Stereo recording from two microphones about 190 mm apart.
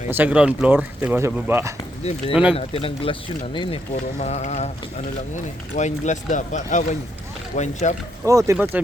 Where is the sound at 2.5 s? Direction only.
30° left (ahead or behind).